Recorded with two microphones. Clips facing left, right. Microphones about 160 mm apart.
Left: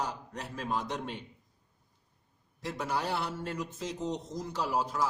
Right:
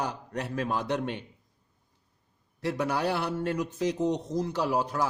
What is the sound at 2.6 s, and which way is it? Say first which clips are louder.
A man's voice: right 6 dB; 65° right (ahead or behind).